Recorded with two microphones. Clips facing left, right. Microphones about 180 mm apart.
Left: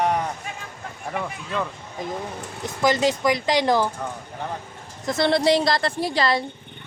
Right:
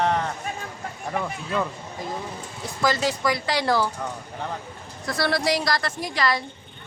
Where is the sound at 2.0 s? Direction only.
20° left (ahead or behind).